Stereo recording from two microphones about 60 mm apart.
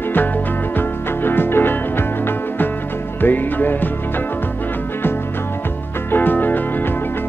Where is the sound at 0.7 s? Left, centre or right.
Left.